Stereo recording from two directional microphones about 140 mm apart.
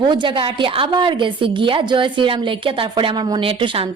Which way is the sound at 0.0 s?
35° right (ahead or behind).